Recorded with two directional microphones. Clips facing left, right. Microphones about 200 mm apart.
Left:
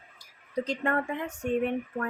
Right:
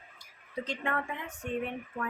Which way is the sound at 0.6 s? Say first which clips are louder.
Left 5 dB; 40° left (ahead or behind).